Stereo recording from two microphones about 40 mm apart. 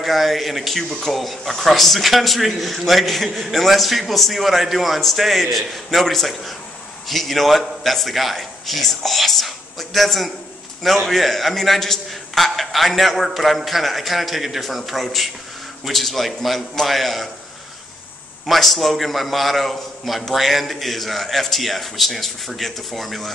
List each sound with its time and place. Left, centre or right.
0.0 s a man's voice: centre
18.5 s a man's voice: centre